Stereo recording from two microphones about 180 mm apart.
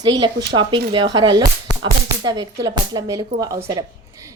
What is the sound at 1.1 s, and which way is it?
Speech, 20° right (ahead or behind).